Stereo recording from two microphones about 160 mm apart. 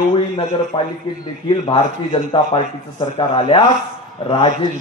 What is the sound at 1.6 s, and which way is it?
Speech, 35° left (ahead or behind).